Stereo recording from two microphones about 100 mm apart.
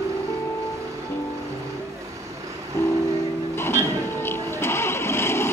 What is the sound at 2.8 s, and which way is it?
Music, 25° left (ahead or behind).